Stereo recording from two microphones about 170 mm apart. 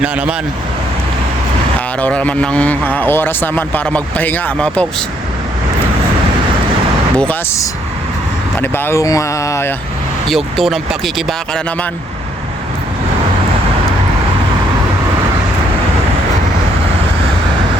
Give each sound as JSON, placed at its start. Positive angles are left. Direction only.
{"t": 0.0, "sound": "speech", "side_deg": -5}
{"t": 2.0, "sound": "a man's voice", "side_deg": 10}
{"t": 7.2, "sound": "a man's voice", "side_deg": 10}
{"t": 10.2, "sound": "speech", "side_deg": 0}